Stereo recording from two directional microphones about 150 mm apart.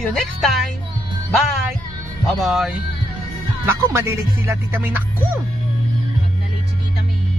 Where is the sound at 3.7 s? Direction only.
15° right (ahead or behind).